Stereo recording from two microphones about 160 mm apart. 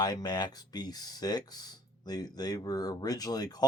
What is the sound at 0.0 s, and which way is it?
Speech, 25° left (ahead or behind).